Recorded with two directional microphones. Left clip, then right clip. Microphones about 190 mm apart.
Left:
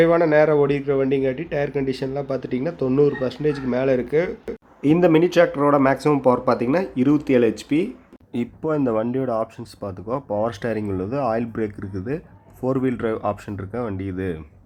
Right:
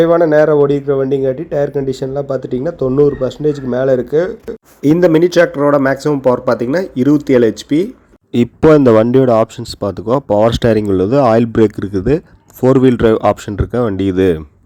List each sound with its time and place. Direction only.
0.0 s speech: 15° right (ahead or behind)
8.3 s speech: 45° right (ahead or behind)